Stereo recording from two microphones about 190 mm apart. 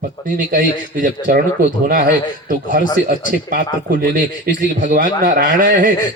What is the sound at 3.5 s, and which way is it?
A man's voice, 45° right (ahead or behind).